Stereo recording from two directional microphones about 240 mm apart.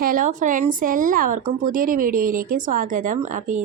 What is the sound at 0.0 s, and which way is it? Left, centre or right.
Speech, right.